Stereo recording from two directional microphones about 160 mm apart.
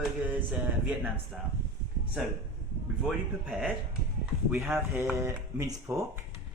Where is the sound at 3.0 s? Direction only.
5° right (ahead or behind).